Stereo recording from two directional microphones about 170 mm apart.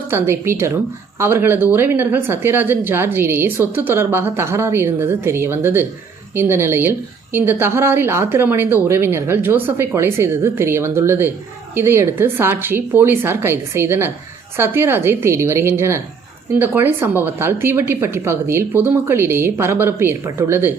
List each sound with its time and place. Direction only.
0.1 s speech: 15° right (ahead or behind)